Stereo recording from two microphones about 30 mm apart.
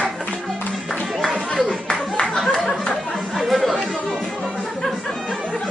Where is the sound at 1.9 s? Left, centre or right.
Left.